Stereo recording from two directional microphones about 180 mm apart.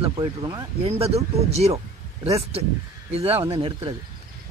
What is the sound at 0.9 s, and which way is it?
Speech, 35° right (ahead or behind).